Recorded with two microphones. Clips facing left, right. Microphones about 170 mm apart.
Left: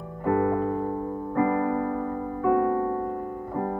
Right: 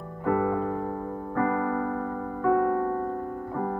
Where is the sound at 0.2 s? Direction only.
10° left (ahead or behind).